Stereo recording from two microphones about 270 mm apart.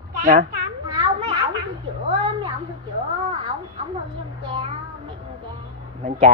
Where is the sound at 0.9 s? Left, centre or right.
Centre.